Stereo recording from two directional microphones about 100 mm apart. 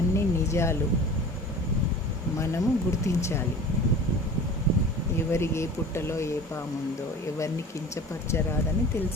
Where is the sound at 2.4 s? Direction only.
30° left (ahead or behind).